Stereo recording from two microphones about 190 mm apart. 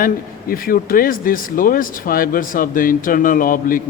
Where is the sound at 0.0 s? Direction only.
50° left (ahead or behind).